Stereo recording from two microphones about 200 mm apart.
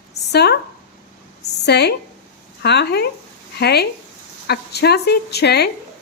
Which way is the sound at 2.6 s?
55° left (ahead or behind).